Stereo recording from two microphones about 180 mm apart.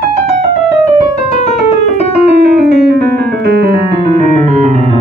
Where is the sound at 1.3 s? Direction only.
40° left (ahead or behind).